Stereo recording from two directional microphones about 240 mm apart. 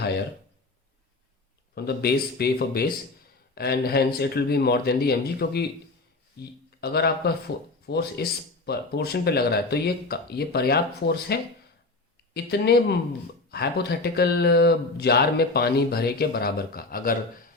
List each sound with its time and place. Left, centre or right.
1.7 s speech: left